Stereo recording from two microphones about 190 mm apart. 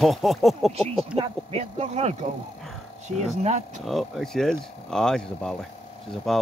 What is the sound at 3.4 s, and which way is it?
Speech, 35° right (ahead or behind).